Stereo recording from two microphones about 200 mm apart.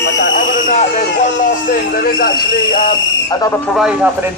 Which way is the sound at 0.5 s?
35° left (ahead or behind).